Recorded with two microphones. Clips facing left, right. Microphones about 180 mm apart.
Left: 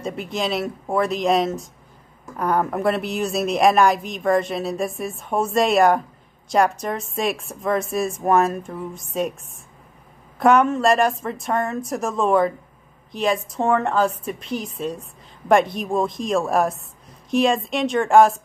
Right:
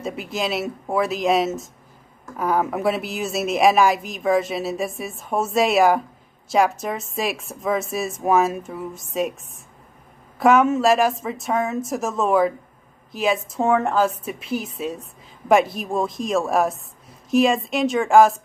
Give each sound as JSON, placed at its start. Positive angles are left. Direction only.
{"t": 0.0, "sound": "speech", "side_deg": 0}
{"t": 10.4, "sound": "speech", "side_deg": 0}